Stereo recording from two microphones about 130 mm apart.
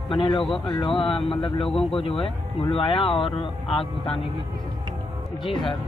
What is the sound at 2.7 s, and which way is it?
Speech, 45° left (ahead or behind).